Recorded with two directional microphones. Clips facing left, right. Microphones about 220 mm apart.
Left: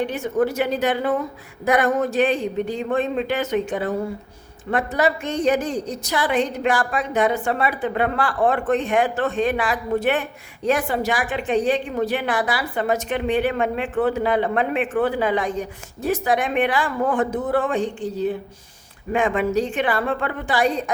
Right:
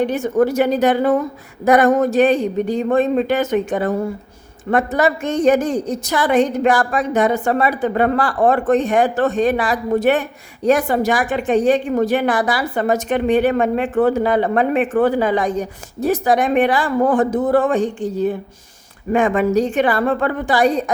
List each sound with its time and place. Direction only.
0.0 s a woman's voice: 45° right (ahead or behind)